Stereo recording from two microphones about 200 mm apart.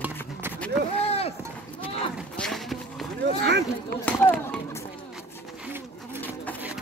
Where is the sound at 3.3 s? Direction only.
60° right (ahead or behind).